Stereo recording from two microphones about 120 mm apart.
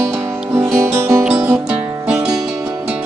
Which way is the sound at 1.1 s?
5° right (ahead or behind).